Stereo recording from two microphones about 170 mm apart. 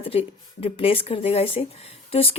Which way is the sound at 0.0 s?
35° left (ahead or behind).